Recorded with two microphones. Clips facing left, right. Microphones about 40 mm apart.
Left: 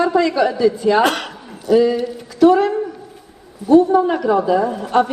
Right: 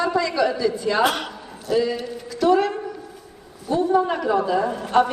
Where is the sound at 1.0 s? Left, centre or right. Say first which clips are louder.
Left 4 dB; left.